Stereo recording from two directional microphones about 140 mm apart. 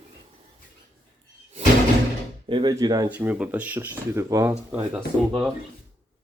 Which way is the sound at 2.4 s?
35° right (ahead or behind).